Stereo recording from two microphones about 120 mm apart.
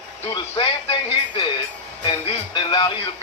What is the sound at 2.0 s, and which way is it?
Music, 40° left (ahead or behind).